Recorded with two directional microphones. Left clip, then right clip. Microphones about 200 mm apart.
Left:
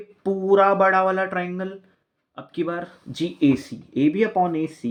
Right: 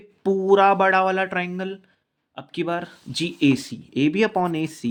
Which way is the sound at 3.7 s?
5° right (ahead or behind).